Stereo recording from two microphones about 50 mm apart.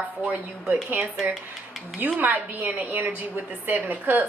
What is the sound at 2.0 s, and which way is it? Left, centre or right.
A woman's voice, right.